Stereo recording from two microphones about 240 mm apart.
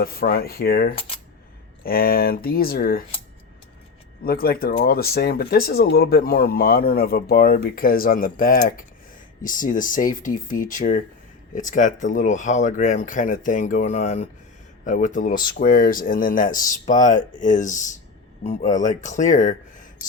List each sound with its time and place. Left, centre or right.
0.0 s speech: left
4.2 s speech: left